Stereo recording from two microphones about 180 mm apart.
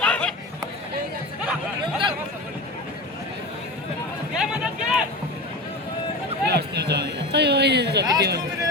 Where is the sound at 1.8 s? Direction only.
25° right (ahead or behind).